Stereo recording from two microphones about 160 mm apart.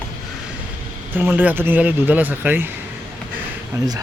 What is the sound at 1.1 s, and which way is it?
Speech, 10° right (ahead or behind).